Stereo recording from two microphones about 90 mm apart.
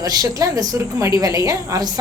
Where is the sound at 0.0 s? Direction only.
45° right (ahead or behind).